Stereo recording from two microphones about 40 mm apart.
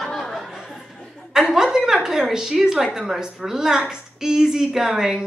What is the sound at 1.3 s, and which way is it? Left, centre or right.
A woman's voice, centre.